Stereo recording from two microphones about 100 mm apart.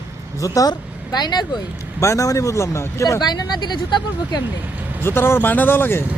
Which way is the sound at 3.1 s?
45° left (ahead or behind).